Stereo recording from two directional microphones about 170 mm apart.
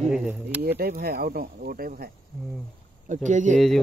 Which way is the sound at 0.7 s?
65° right (ahead or behind).